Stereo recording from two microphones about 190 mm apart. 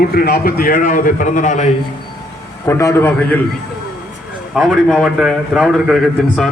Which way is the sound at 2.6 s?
15° left (ahead or behind).